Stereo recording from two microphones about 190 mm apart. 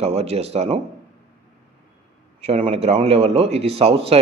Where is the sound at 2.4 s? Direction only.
30° right (ahead or behind).